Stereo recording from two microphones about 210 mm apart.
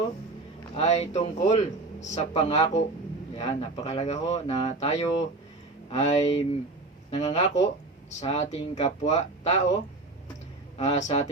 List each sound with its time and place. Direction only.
0.8 s speech: 30° left (ahead or behind)